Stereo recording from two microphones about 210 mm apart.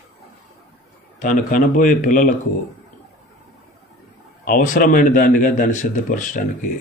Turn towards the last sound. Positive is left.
turn(degrees=40)  # may be behind; listen again after turning